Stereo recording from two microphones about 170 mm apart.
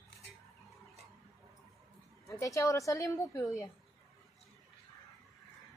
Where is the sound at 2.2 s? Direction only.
20° left (ahead or behind).